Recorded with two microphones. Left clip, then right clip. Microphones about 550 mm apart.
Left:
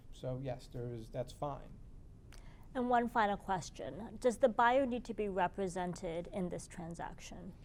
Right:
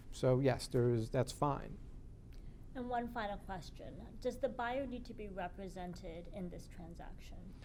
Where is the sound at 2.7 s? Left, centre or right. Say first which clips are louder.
Left 8 dB; left.